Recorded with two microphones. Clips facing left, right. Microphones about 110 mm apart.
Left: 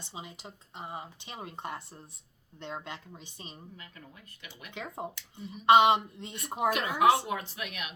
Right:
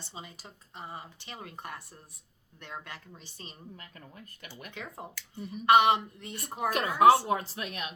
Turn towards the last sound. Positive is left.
turn(degrees=-35)  # may be behind; listen again after turning